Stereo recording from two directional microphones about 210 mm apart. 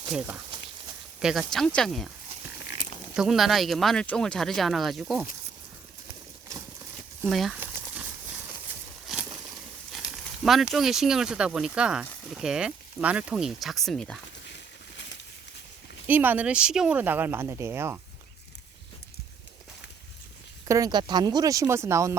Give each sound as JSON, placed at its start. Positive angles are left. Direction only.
{"t": 0.1, "sound": "speech", "side_deg": -10}
{"t": 3.2, "sound": "speech", "side_deg": 0}
{"t": 7.3, "sound": "a sound", "side_deg": 0}
{"t": 9.9, "sound": "speech", "side_deg": 0}
{"t": 16.0, "sound": "speech", "side_deg": -10}
{"t": 20.7, "sound": "speech", "side_deg": -15}